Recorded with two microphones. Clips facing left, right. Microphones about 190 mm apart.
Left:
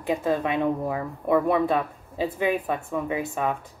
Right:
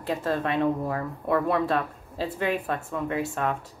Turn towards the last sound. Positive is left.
turn(degrees=10)  # may be behind; listen again after turning